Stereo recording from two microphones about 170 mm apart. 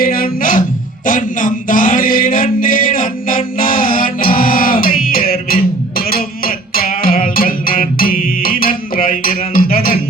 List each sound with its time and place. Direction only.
0.0 s music: 55° left (ahead or behind)
1.0 s mantra: 50° left (ahead or behind)
6.1 s music: 60° left (ahead or behind)